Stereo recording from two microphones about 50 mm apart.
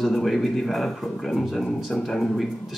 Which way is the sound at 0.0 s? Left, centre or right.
Centre.